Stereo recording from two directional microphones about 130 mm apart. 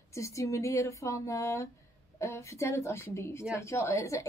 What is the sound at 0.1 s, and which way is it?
Speech, 20° left (ahead or behind).